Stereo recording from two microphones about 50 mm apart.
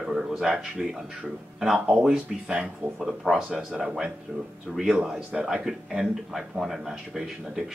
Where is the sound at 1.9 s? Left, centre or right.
Centre.